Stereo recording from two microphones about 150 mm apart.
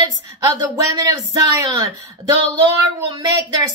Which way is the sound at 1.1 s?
20° right (ahead or behind).